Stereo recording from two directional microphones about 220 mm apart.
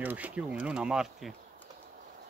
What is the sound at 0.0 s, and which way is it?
Speech, 5° right (ahead or behind).